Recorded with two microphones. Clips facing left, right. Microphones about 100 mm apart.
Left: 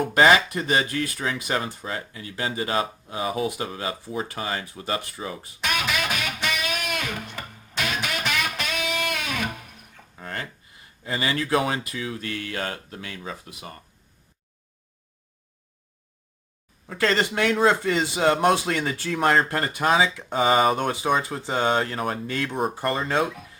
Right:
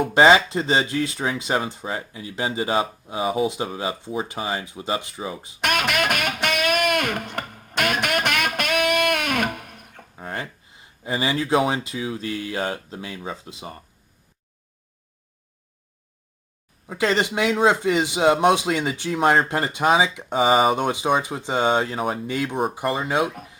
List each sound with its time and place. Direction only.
0.1 s speech: 25° right (ahead or behind)
5.5 s music: 60° right (ahead or behind)
10.2 s speech: 20° right (ahead or behind)
16.8 s speech: 15° right (ahead or behind)